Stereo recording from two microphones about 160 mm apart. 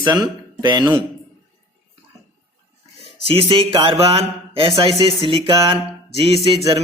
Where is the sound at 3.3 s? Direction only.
35° right (ahead or behind).